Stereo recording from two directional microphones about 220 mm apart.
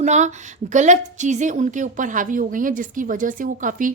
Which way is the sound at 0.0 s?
30° right (ahead or behind).